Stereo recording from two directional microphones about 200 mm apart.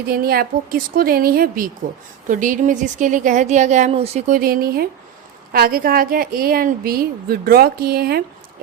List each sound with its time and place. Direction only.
0.1 s a woman's voice: 50° right (ahead or behind); by 4.4 s 30° right (ahead or behind)
4.4 s a woman's voice: 45° right (ahead or behind)